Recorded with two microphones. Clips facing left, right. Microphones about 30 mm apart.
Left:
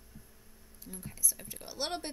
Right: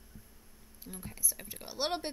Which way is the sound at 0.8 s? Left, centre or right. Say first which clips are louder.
Left 1 dB; centre.